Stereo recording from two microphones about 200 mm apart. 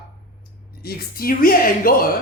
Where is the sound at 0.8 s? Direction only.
50° left (ahead or behind).